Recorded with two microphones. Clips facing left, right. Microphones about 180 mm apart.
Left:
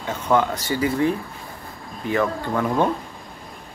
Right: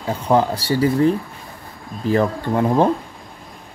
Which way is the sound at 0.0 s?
35° right (ahead or behind).